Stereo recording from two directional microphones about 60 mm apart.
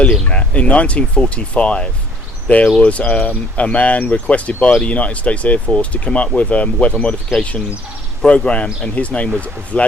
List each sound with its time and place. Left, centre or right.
0.0 s speech: centre
8.3 s speech: centre